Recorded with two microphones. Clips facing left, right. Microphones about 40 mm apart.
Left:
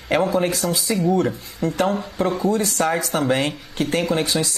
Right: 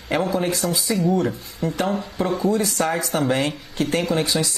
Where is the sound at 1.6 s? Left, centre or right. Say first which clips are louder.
Left 2 dB; left.